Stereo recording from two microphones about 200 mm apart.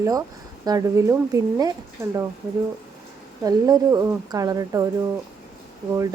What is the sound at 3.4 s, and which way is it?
Speech, 20° right (ahead or behind).